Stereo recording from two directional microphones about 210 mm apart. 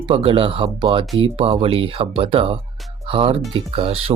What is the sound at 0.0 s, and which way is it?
Speech, 25° right (ahead or behind).